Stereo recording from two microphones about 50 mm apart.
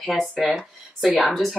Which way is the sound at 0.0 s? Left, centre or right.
Centre.